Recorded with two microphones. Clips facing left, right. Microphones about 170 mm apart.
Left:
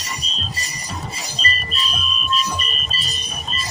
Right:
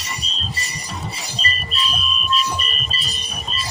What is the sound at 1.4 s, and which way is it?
Music, 40° left (ahead or behind).